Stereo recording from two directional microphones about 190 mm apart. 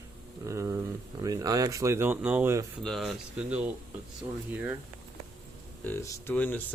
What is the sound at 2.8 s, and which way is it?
Speech, centre (ahead or behind).